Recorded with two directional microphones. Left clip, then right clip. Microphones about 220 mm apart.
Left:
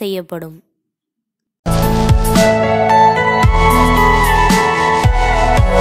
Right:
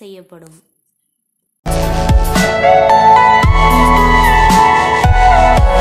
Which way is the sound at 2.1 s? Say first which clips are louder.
Left 3 dB; centre (ahead or behind).